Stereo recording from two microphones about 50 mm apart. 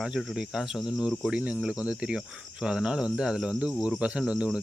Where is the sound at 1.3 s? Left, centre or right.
Right.